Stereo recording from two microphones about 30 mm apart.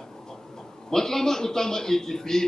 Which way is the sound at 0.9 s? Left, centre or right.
Centre.